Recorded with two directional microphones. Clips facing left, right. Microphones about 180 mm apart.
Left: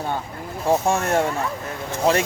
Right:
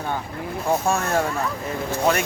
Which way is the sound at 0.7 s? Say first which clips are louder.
Left 2 dB; 25° left (ahead or behind).